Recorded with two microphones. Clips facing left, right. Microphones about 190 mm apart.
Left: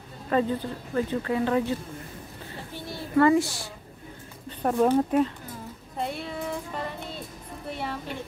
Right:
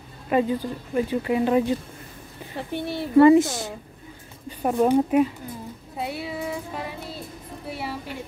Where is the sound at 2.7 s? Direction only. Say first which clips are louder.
Right 10 dB; 65° right (ahead or behind).